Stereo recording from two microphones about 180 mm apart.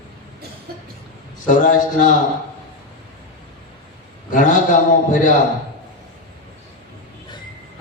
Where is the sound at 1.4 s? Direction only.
45° left (ahead or behind).